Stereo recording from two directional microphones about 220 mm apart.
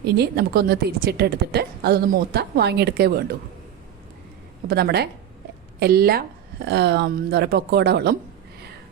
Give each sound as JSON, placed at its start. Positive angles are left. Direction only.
{"t": 0.0, "sound": "a woman's voice", "side_deg": -45}
{"t": 4.7, "sound": "a woman's voice", "side_deg": -45}